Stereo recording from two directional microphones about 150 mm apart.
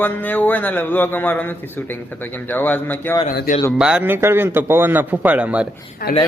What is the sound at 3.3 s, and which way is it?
Speech, 75° left (ahead or behind).